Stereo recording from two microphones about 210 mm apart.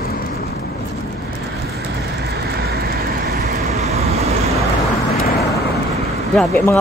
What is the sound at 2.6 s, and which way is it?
Vehicle, 45° right (ahead or behind).